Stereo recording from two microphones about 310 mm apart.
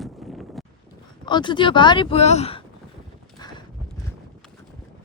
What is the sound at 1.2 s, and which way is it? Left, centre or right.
Speech, centre.